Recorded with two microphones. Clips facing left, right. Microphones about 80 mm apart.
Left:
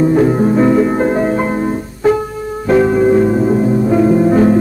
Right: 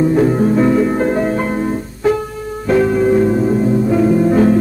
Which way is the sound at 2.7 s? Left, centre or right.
Centre.